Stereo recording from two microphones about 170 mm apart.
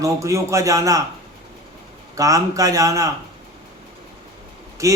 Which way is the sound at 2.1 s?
20° right (ahead or behind).